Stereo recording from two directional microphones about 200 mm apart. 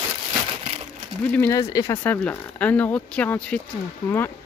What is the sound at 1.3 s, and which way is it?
Speech, 15° left (ahead or behind).